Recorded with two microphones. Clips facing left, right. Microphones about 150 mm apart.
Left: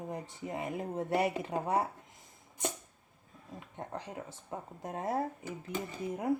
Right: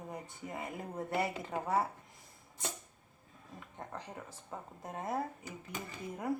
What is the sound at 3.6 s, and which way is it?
Speech, 20° left (ahead or behind).